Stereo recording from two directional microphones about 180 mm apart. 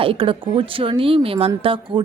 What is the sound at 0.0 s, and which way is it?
Speech, 30° right (ahead or behind).